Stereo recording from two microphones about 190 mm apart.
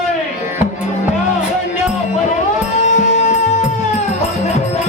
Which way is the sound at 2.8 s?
40° left (ahead or behind).